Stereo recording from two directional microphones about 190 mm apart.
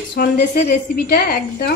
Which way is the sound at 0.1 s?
55° left (ahead or behind).